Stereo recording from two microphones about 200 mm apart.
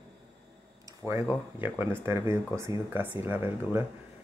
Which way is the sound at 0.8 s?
15° right (ahead or behind).